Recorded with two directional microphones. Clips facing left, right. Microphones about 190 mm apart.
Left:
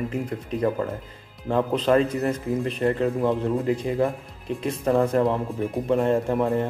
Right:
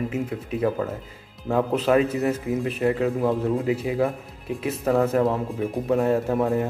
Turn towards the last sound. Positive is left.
turn(degrees=-5)  # may be behind; listen again after turning